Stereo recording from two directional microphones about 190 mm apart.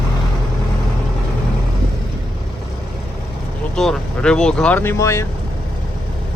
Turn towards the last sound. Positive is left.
turn(degrees=15)  # may be behind; listen again after turning